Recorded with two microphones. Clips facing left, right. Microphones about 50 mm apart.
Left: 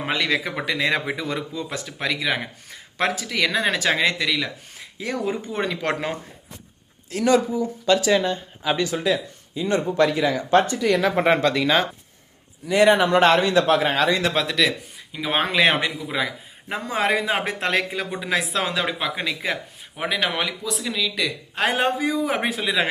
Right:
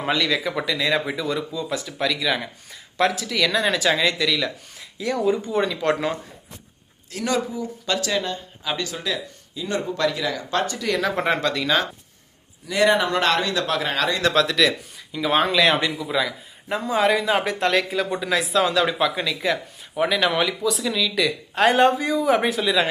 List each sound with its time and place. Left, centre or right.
0.2 s a man's voice: left
4.3 s speech: centre
4.8 s a sound: left
5.2 s a man's voice: left
7.2 s speech: centre
8.0 s speech: centre
10.8 s speech: centre
14.4 s speech: centre
15.1 s a man's voice: left
17.9 s speech: centre
18.2 s a man's voice: left
18.9 s speech: centre
19.1 s speech: left
20.0 s speech: centre